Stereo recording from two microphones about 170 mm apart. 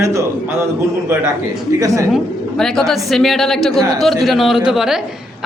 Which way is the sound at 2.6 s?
Centre (ahead or behind).